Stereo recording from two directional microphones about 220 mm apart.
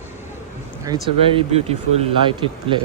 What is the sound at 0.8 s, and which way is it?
Speech, 20° right (ahead or behind).